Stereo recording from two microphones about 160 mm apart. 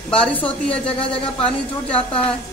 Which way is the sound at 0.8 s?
35° left (ahead or behind).